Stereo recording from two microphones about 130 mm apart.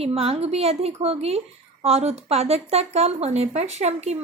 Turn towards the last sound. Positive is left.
turn(degrees=-60)  # may be behind; listen again after turning